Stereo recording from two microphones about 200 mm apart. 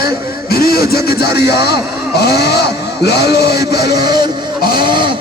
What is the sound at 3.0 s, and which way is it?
Music, 55° left (ahead or behind).